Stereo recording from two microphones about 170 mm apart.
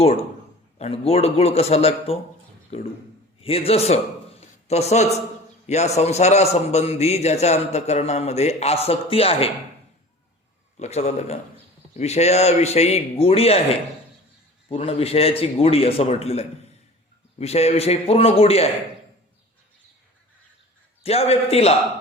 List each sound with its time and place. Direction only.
0.0 s a man's voice: 35° left (ahead or behind)
3.4 s a man's voice: 35° left (ahead or behind)
10.8 s a man's voice: 40° left (ahead or behind)
14.7 s a man's voice: 35° left (ahead or behind)
21.0 s a man's voice: 35° left (ahead or behind)